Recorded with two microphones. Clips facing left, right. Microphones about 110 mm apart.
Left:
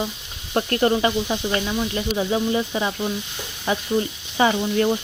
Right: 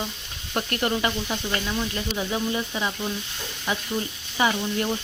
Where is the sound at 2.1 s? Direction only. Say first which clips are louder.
Left 6 dB; 20° left (ahead or behind).